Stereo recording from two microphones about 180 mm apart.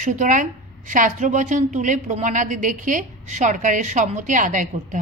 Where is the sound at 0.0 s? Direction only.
45° right (ahead or behind).